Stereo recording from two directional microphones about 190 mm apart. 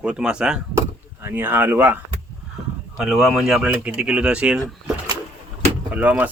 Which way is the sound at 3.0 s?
5° right (ahead or behind).